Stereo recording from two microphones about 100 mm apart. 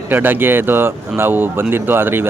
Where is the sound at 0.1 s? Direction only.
20° right (ahead or behind).